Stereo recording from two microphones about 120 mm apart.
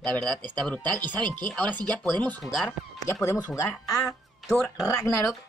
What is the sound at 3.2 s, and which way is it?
Speech, 25° left (ahead or behind).